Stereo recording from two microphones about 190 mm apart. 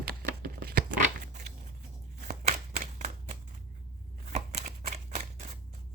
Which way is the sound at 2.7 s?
40° right (ahead or behind).